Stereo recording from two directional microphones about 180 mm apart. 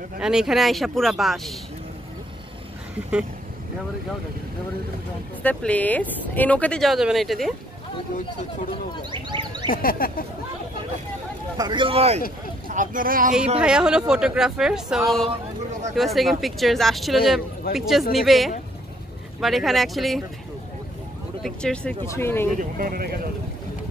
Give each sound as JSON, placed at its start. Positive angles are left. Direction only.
{"t": 0.2, "sound": "speech", "side_deg": -5}
{"t": 5.4, "sound": "speech", "side_deg": 10}
{"t": 9.1, "sound": "speech", "side_deg": -25}
{"t": 9.7, "sound": "speech", "side_deg": 55}
{"t": 11.5, "sound": "speech", "side_deg": -25}
{"t": 12.6, "sound": "speech", "side_deg": -50}
{"t": 13.6, "sound": "speech", "side_deg": -5}
{"t": 21.4, "sound": "speech", "side_deg": 0}
{"t": 22.0, "sound": "speech", "side_deg": 15}
{"t": 22.6, "sound": "speech", "side_deg": -55}